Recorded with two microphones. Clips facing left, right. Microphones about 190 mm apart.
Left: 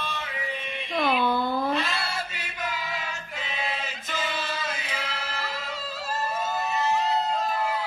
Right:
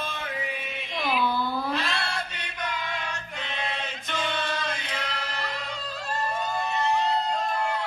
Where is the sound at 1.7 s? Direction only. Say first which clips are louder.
Left 2 dB; centre (ahead or behind).